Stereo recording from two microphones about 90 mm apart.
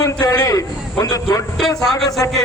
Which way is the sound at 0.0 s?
45° left (ahead or behind).